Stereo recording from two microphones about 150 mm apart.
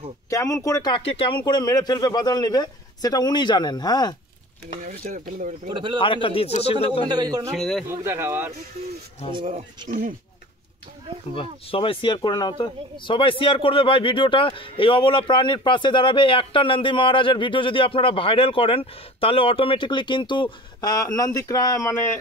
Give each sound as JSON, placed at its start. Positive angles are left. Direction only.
{"t": 0.3, "sound": "speech", "side_deg": 20}
{"t": 0.9, "sound": "speech", "side_deg": 40}
{"t": 1.4, "sound": "speech", "side_deg": 25}
{"t": 4.8, "sound": "speech", "side_deg": -70}
{"t": 5.7, "sound": "speech", "side_deg": -35}
{"t": 5.9, "sound": "speech", "side_deg": 35}
{"t": 7.1, "sound": "a man's voice", "side_deg": -25}
{"t": 7.5, "sound": "speech", "side_deg": 5}
{"t": 7.9, "sound": "speech", "side_deg": -15}
{"t": 9.3, "sound": "speech", "side_deg": -30}
{"t": 9.8, "sound": "speech", "side_deg": -65}
{"t": 11.3, "sound": "speech", "side_deg": 35}